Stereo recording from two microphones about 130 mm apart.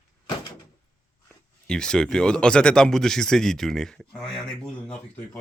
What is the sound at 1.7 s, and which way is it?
Speech, 5° left (ahead or behind).